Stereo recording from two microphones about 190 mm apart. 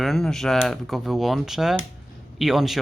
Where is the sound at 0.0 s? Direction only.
Centre (ahead or behind).